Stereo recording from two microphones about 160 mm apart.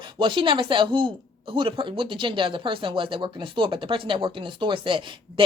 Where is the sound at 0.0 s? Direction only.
30° right (ahead or behind).